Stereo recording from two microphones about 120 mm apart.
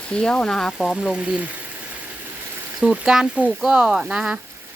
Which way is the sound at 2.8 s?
5° right (ahead or behind).